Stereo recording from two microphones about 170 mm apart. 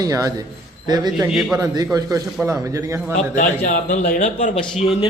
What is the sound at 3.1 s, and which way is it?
Speech, 50° left (ahead or behind).